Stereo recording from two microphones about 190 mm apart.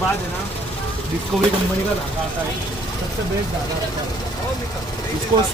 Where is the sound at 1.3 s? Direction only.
Centre (ahead or behind).